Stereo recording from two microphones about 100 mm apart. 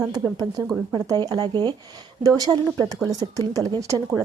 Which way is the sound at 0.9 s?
40° right (ahead or behind).